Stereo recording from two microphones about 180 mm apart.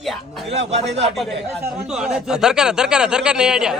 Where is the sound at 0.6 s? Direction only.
35° right (ahead or behind).